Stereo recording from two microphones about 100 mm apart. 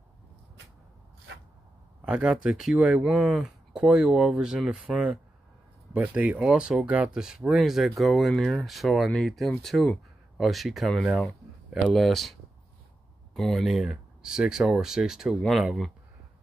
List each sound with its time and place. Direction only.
2.0 s speech: 10° right (ahead or behind)